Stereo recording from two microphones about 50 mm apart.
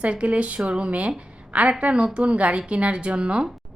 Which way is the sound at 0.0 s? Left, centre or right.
Right.